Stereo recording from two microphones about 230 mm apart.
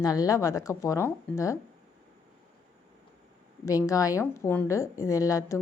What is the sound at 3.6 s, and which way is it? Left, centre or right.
A woman's voice, centre.